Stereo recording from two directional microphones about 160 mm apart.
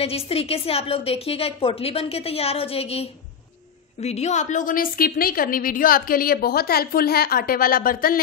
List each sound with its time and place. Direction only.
0.0 s a woman's voice: 40° left (ahead or behind); by 8.2 s 60° left (ahead or behind)